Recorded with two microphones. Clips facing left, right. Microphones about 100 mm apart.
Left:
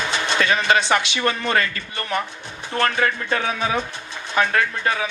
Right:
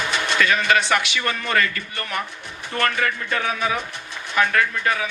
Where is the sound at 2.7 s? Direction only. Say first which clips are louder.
Left 2 dB; 30° left (ahead or behind).